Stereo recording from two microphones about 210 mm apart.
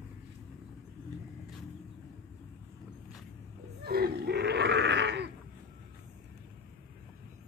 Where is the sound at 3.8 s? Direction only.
50° right (ahead or behind).